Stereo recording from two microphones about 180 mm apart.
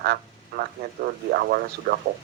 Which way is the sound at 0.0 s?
60° right (ahead or behind).